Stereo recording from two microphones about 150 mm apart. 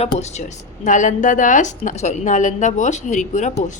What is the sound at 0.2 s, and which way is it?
Speech, 50° left (ahead or behind).